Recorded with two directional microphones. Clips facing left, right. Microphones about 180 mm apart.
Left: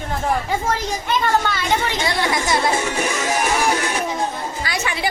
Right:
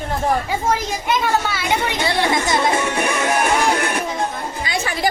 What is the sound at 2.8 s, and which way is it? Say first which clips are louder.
Music: right 2 dB; 60° right (ahead or behind).